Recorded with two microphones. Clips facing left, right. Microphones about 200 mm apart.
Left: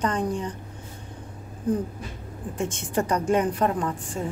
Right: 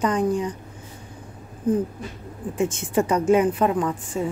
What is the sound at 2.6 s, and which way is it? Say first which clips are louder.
A woman's voice: right 5 dB; 5° right (ahead or behind).